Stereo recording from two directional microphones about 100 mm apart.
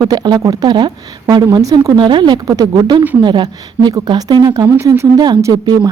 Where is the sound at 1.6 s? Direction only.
35° right (ahead or behind).